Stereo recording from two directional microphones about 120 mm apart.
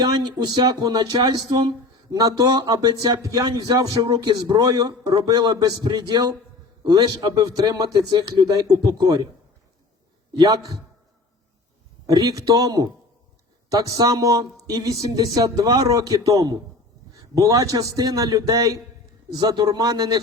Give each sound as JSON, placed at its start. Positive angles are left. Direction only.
{"t": 0.0, "sound": "speech", "side_deg": -35}
{"t": 10.3, "sound": "speech", "side_deg": -30}
{"t": 12.0, "sound": "a man's voice", "side_deg": -30}